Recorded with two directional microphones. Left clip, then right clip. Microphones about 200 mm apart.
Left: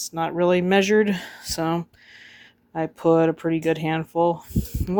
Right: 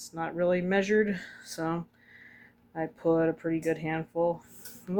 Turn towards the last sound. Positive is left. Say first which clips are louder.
# left 7 dB
turn(degrees=30)  # may be behind; listen again after turning